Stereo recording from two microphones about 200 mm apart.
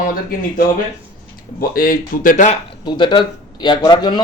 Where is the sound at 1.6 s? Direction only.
45° left (ahead or behind).